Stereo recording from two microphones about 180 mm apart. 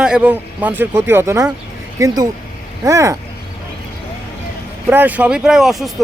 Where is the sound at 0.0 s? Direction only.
5° right (ahead or behind).